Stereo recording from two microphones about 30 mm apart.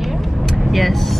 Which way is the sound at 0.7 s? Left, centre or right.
Centre.